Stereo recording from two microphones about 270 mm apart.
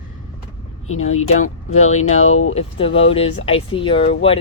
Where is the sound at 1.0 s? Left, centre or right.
Left.